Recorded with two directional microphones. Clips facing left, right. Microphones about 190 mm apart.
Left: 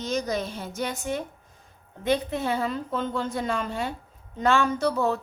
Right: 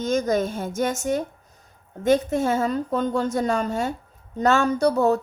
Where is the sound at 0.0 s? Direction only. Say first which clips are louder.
Right 6 dB; 50° right (ahead or behind).